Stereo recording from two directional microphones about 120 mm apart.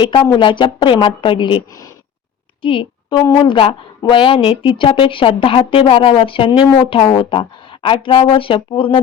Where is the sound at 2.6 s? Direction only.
45° left (ahead or behind).